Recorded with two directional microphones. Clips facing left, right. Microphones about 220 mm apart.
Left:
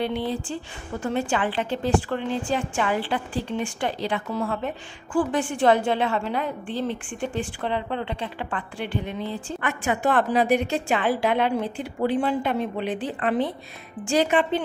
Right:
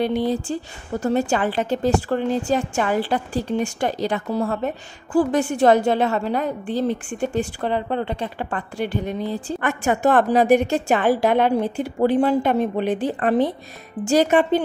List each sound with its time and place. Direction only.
0.0 s a woman's voice: 40° right (ahead or behind)